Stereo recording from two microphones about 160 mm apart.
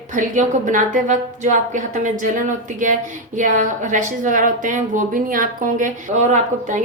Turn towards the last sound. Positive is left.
turn(degrees=-50)  # may be behind; listen again after turning